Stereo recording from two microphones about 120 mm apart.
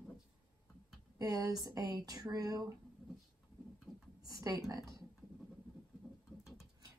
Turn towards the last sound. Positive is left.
turn(degrees=-30)  # may be behind; listen again after turning